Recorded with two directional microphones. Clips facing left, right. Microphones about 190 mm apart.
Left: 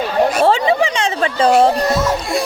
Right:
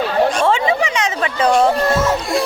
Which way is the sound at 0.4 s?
35° left (ahead or behind).